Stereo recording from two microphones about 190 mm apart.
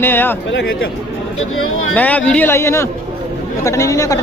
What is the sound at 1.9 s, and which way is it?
A man's voice, 10° left (ahead or behind).